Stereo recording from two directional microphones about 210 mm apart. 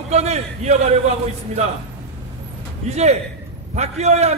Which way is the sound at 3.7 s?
30° right (ahead or behind).